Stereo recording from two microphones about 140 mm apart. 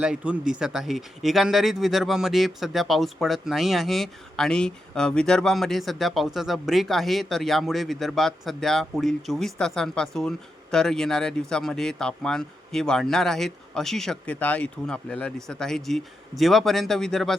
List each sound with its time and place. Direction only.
0.0 s speech: 5° right (ahead or behind)